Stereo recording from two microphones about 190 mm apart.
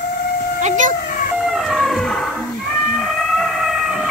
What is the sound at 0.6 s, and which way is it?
Speech, 40° right (ahead or behind).